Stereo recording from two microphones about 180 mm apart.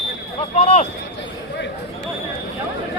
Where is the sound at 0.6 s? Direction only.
40° left (ahead or behind).